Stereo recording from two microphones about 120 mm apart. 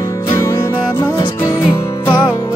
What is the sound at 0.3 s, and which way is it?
Music, 25° left (ahead or behind).